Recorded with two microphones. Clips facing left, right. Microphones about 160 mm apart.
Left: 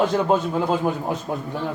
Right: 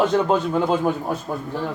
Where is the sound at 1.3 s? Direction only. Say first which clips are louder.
Even; 20° left (ahead or behind).